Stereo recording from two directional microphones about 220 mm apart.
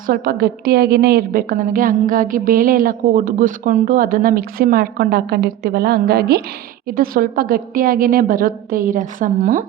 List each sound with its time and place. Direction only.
0.1 s a woman's voice: 40° right (ahead or behind)